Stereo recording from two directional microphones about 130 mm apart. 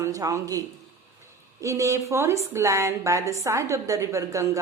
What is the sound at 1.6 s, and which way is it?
A woman's voice, 25° right (ahead or behind).